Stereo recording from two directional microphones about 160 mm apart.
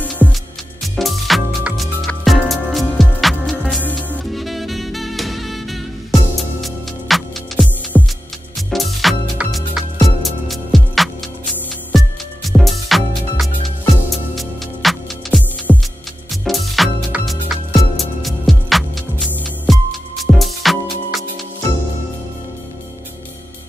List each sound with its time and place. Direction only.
0.0 s music: 10° left (ahead or behind)